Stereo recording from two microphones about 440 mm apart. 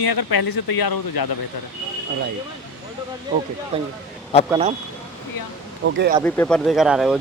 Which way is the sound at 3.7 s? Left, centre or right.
Centre.